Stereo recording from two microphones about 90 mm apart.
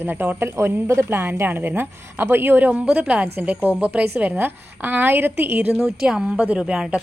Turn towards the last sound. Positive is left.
turn(degrees=-10)  # may be behind; listen again after turning